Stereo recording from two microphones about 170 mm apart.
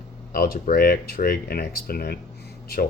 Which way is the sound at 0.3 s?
60° left (ahead or behind).